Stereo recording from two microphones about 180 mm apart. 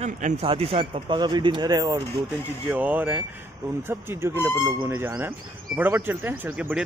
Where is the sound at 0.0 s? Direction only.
35° right (ahead or behind).